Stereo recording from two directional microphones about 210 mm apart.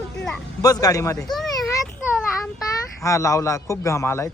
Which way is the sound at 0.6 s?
15° left (ahead or behind).